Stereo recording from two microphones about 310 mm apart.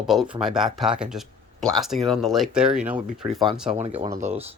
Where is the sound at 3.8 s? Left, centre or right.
Right.